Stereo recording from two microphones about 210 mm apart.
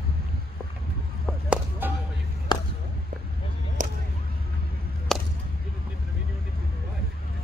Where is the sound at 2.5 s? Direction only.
20° left (ahead or behind).